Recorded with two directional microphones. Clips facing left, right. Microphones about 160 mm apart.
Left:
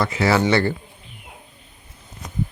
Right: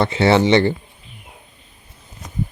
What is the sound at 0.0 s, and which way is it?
Speech, 25° right (ahead or behind).